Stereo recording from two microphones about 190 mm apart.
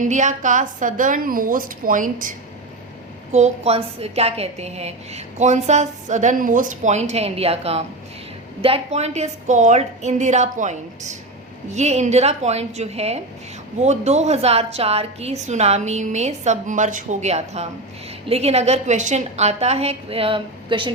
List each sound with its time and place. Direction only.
0.0 s a woman's voice: 40° right (ahead or behind)
3.3 s a woman's voice: 35° right (ahead or behind)